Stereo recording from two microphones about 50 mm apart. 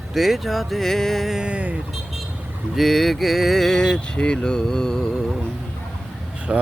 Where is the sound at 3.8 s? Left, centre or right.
Centre.